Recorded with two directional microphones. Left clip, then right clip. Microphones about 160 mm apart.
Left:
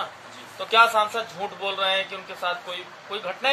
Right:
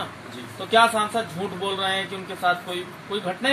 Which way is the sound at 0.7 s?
75° left (ahead or behind).